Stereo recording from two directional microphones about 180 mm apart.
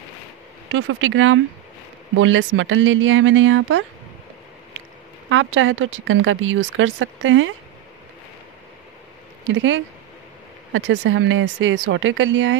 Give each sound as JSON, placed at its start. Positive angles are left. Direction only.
{"t": 0.7, "sound": "speech", "side_deg": -90}
{"t": 5.3, "sound": "speech", "side_deg": -90}
{"t": 9.5, "sound": "speech", "side_deg": -90}